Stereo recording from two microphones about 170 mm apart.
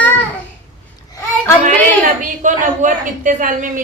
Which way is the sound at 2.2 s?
50° right (ahead or behind).